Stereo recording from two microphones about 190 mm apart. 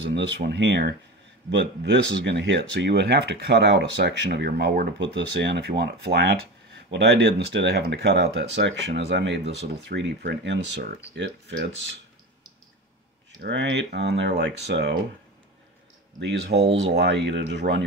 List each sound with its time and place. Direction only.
0.0 s speech: 70° right (ahead or behind)
13.4 s speech: 70° right (ahead or behind)
16.2 s speech: 65° right (ahead or behind)